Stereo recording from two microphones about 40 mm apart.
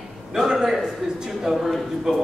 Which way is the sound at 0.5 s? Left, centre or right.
Centre.